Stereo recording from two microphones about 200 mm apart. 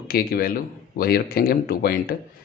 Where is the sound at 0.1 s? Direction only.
50° left (ahead or behind).